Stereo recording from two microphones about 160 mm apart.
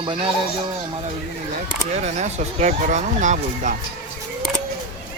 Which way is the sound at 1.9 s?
45° right (ahead or behind).